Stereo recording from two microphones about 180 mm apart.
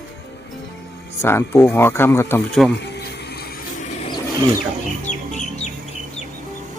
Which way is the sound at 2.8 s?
65° left (ahead or behind).